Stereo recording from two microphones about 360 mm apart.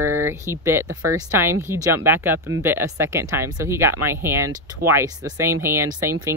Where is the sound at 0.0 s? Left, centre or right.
Right.